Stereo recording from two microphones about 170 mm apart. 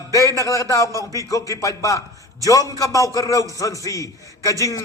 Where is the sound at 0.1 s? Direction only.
20° right (ahead or behind).